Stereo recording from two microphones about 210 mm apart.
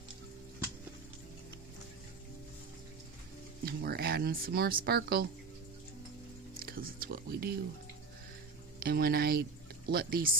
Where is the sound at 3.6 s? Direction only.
45° right (ahead or behind).